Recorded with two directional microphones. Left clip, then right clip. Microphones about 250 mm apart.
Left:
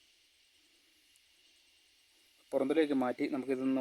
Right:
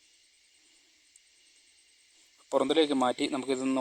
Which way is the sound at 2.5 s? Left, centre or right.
Centre.